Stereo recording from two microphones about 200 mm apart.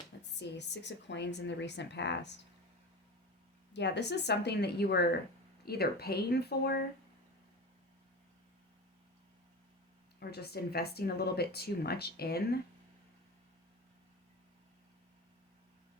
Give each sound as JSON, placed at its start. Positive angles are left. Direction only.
{"t": 0.2, "sound": "a woman's voice", "side_deg": 60}
{"t": 3.7, "sound": "a woman's voice", "side_deg": 60}
{"t": 10.2, "sound": "speech", "side_deg": 50}